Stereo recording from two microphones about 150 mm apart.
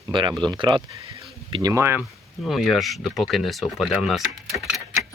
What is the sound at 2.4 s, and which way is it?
Speech, centre (ahead or behind).